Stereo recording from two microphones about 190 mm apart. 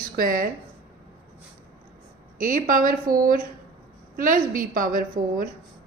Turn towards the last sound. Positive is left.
turn(degrees=-45)  # may be behind; listen again after turning